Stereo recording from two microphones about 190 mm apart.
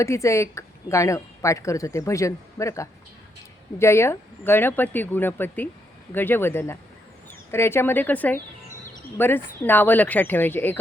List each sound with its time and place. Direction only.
0.0 s a woman's voice: 15° left (ahead or behind)